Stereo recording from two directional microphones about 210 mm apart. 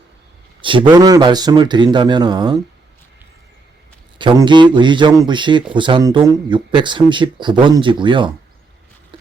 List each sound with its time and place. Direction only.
0.6 s speech: 25° right (ahead or behind)
4.2 s speech: 20° right (ahead or behind)